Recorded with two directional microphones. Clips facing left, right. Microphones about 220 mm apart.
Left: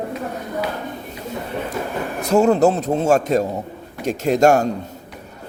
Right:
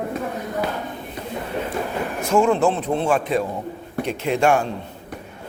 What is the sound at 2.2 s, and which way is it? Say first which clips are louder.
A man's voice: left 3 dB; 40° left (ahead or behind).